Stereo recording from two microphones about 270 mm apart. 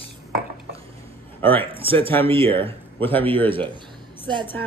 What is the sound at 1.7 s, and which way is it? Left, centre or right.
Speech, centre.